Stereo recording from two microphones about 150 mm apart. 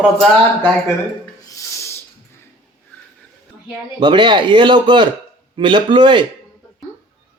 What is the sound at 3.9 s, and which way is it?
A man's voice, 30° right (ahead or behind).